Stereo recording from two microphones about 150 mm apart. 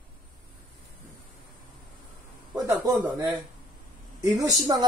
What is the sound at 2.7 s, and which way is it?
A woman's voice, 20° right (ahead or behind).